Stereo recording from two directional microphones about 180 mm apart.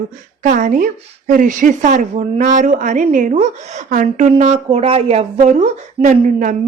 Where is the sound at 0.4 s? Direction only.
45° right (ahead or behind).